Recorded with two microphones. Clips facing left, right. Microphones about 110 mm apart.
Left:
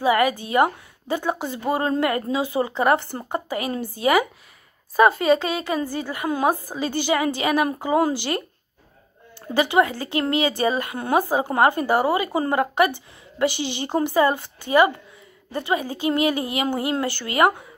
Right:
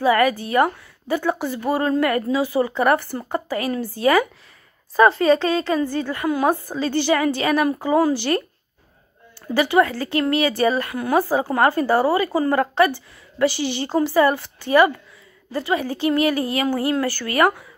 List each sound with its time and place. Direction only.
0.0 s a woman's voice: 20° left (ahead or behind)
9.5 s speech: 20° left (ahead or behind)